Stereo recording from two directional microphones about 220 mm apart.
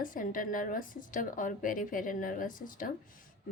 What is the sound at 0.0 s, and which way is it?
Speech, 40° left (ahead or behind).